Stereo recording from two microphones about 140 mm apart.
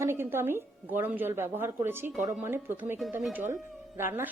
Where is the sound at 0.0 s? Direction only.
15° right (ahead or behind).